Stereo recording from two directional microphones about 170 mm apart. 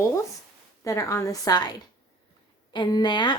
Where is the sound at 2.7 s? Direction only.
25° left (ahead or behind).